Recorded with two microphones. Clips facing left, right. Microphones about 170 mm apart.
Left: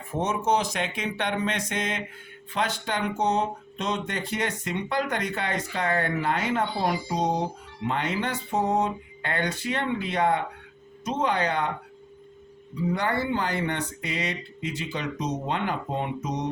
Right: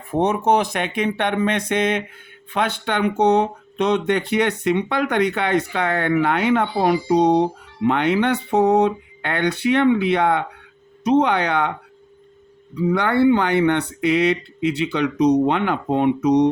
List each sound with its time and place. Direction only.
0.1 s speech: 60° right (ahead or behind)
12.9 s speech: 70° right (ahead or behind)